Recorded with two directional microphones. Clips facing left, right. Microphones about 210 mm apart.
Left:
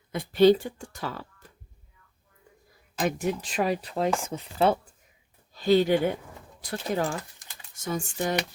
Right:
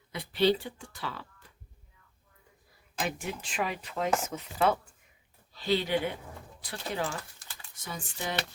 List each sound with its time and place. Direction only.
0.1 s speech: 45° left (ahead or behind)
3.0 s speech: 40° left (ahead or behind)
5.5 s speech: 45° left (ahead or behind)